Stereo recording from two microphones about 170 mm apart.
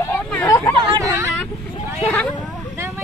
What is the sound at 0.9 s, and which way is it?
Speech, 20° right (ahead or behind).